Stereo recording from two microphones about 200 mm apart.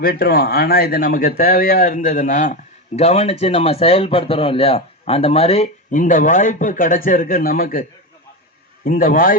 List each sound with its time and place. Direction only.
0.0 s a man's voice: 50° left (ahead or behind)